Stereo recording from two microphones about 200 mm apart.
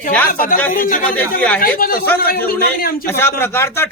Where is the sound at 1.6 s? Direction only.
45° left (ahead or behind).